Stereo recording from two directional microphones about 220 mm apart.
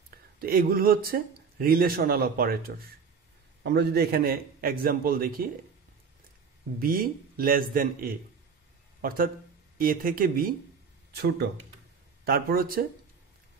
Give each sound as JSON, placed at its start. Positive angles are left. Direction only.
{"t": 0.4, "sound": "a man's voice", "side_deg": -40}
{"t": 6.8, "sound": "a man's voice", "side_deg": -40}
{"t": 12.3, "sound": "a man's voice", "side_deg": -45}